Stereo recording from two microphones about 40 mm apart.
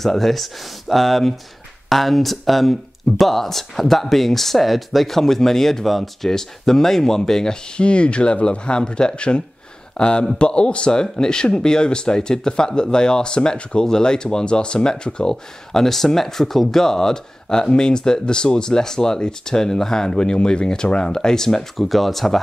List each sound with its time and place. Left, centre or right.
0.0 s speech: centre; by 15.3 s left
15.7 s speech: centre
21.7 s speech: centre